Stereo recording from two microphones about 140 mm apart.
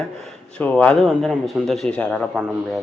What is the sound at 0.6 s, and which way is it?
Speech, 10° left (ahead or behind).